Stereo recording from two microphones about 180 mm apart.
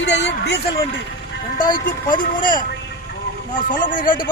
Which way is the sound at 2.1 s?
50° left (ahead or behind).